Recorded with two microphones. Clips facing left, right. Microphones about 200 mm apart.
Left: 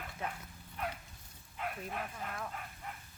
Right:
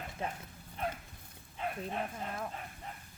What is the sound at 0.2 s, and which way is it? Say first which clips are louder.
Speech: right 2 dB; 30° right (ahead or behind).